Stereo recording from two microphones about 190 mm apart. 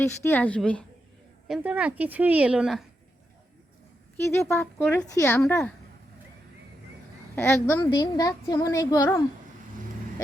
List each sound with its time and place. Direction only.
0.0 s a woman's voice: 10° left (ahead or behind)
1.5 s a woman's voice: 5° right (ahead or behind)
4.2 s a woman's voice: 15° left (ahead or behind)
7.3 s a woman's voice: 15° left (ahead or behind)